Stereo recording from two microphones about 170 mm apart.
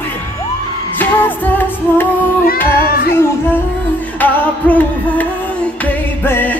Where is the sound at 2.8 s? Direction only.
65° left (ahead or behind).